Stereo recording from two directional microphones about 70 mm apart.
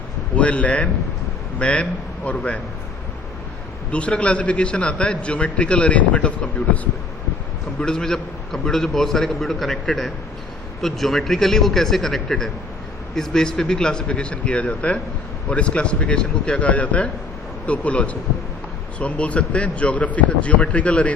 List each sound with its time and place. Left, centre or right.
0.3 s a man's voice: centre
3.9 s a man's voice: centre
7.8 s a man's voice: centre